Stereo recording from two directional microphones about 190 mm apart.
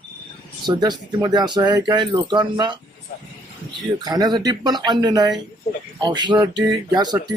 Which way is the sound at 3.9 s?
20° right (ahead or behind).